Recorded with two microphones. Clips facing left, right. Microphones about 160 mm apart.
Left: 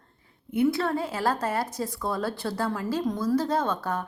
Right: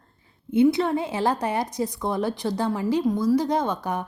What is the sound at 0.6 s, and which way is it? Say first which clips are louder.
A woman's voice: right 4 dB; 15° right (ahead or behind).